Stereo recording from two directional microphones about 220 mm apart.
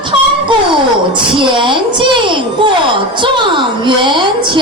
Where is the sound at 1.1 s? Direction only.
20° right (ahead or behind).